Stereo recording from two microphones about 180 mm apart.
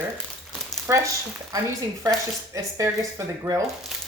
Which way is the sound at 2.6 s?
15° right (ahead or behind).